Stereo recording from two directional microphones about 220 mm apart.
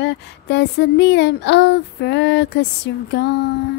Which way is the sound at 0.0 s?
50° left (ahead or behind).